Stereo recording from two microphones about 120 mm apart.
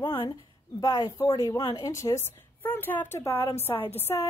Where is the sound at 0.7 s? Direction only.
35° left (ahead or behind).